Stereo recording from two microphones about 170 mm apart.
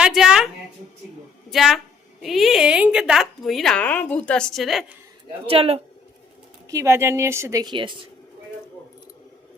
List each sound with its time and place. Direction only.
0.0 s a sound: 5° right (ahead or behind)
1.5 s a woman's voice: centre (ahead or behind)
5.5 s speech: 35° right (ahead or behind)
6.7 s a woman's voice: 15° right (ahead or behind)